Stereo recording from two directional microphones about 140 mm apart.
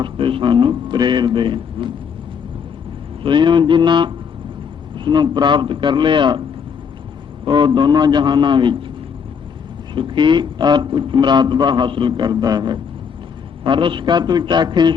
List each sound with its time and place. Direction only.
0.0 s a man's voice: 35° right (ahead or behind)
3.2 s a man's voice: 35° right (ahead or behind)
7.4 s a man's voice: 35° right (ahead or behind)
9.9 s a man's voice: 35° right (ahead or behind)